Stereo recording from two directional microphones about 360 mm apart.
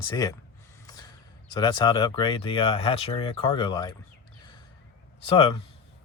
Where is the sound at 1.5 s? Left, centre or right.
Centre.